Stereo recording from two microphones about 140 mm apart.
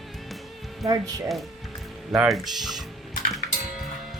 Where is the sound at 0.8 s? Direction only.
25° right (ahead or behind).